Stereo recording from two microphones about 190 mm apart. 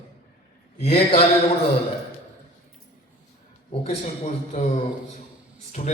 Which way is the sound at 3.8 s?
35° left (ahead or behind).